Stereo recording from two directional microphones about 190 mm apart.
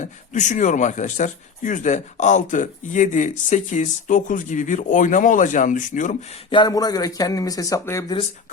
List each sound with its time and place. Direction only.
0.3 s speech: 40° left (ahead or behind)
6.5 s speech: 20° left (ahead or behind)